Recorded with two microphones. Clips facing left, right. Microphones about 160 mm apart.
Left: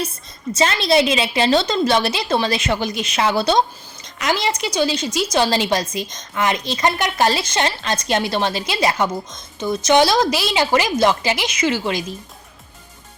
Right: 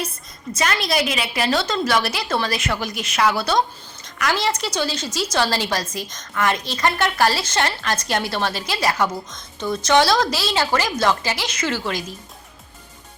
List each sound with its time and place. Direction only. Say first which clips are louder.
0.5 s a woman's voice: left 5 dB; 25° left (ahead or behind)